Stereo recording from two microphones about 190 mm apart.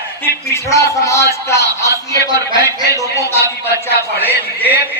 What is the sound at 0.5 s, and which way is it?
A man's voice, 15° left (ahead or behind).